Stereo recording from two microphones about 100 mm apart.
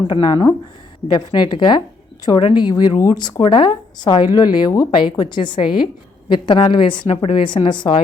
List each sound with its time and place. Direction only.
0.1 s a woman's voice: 50° left (ahead or behind)
4.9 s a woman's voice: 50° left (ahead or behind)